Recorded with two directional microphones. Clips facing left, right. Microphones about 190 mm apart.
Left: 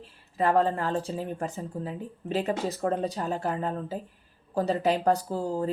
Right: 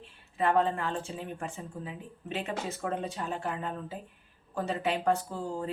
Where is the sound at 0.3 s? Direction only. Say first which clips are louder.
Left 3 dB; 35° left (ahead or behind).